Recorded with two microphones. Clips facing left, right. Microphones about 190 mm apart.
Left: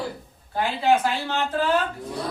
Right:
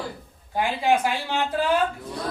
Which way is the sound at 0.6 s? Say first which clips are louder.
Left 1 dB; 15° right (ahead or behind).